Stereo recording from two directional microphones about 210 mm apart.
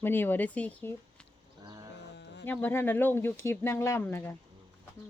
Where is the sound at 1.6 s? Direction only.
15° right (ahead or behind).